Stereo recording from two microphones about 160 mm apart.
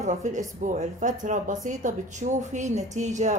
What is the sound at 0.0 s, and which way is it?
A woman's voice, 50° right (ahead or behind).